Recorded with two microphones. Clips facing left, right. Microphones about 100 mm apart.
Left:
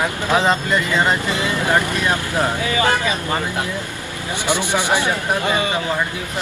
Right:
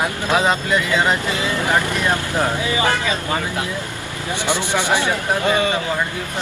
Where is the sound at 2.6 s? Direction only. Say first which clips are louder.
Left 1 dB; 20° right (ahead or behind).